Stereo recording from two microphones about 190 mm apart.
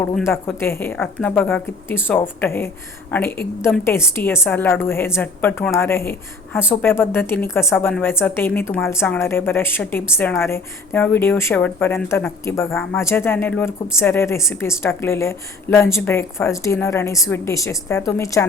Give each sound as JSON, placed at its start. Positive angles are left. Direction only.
{"t": 0.3, "sound": "a woman's voice", "side_deg": 15}